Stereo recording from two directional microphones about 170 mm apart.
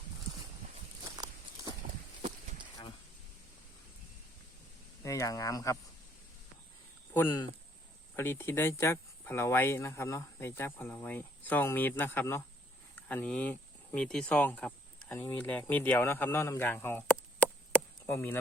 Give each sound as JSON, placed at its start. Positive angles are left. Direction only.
{"t": 1.2, "sound": "a sound", "side_deg": -20}
{"t": 5.0, "sound": "speech", "side_deg": 20}
{"t": 7.1, "sound": "speech", "side_deg": 15}
{"t": 17.4, "sound": "chop", "side_deg": 10}